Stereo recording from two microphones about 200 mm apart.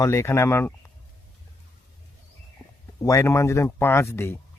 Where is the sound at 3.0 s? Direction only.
15° left (ahead or behind).